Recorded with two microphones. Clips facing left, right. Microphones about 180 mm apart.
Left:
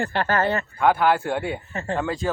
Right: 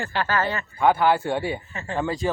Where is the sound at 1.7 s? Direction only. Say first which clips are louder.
Left 5 dB; 45° left (ahead or behind).